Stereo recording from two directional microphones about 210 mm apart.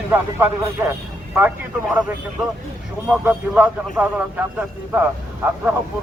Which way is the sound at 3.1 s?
5° right (ahead or behind).